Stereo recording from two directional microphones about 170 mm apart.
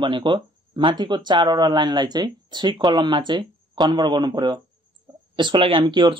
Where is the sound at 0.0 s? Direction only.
30° right (ahead or behind).